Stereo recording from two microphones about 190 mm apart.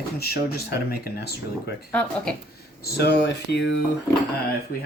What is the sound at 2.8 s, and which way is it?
Speech, 55° left (ahead or behind).